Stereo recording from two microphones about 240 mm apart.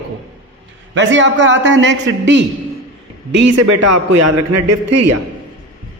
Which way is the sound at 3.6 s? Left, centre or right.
Right.